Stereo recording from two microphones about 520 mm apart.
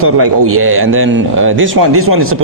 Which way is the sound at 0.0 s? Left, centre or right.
Right.